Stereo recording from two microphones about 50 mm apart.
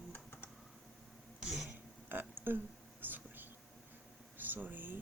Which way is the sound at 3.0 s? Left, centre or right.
Right.